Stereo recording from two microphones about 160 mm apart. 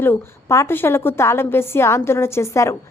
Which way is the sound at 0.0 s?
15° left (ahead or behind).